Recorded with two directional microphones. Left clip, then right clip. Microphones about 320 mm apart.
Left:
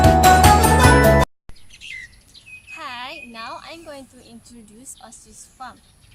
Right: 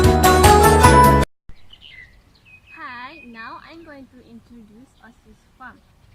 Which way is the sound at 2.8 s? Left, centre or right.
Left.